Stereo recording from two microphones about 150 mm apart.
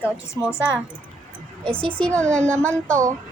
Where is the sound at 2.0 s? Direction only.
5° left (ahead or behind).